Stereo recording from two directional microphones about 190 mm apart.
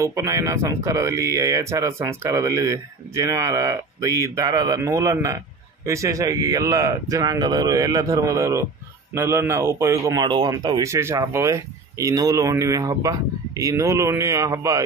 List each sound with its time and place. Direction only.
0.0 s speech: 15° right (ahead or behind)